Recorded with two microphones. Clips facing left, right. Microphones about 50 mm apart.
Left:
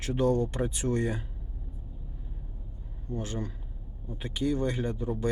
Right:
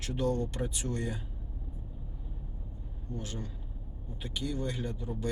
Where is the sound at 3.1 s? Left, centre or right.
Left.